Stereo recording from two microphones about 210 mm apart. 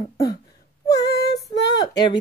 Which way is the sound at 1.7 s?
20° left (ahead or behind).